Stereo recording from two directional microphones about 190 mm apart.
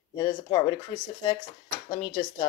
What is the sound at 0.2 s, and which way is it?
Speech, 25° left (ahead or behind).